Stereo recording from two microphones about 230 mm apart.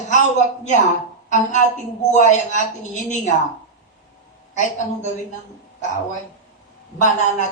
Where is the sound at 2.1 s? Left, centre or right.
Left.